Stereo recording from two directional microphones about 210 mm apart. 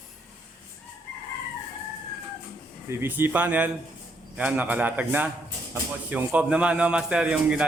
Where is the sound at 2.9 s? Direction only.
10° right (ahead or behind).